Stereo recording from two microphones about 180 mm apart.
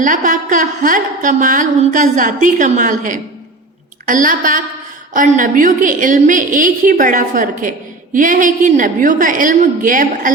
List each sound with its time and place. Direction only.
0.0 s a woman's voice: 45° right (ahead or behind)